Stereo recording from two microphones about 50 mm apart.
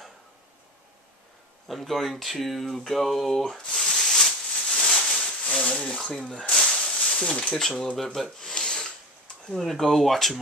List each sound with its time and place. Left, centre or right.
1.7 s speech: centre
2.3 s a sound: centre
7.2 s speech: left
7.5 s speech: centre
8.0 s filing: centre
9.5 s speech: centre